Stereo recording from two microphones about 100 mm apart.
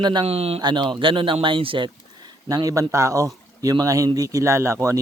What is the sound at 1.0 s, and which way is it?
Speech, 60° right (ahead or behind).